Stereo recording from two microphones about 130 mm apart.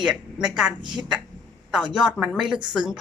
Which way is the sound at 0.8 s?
35° right (ahead or behind).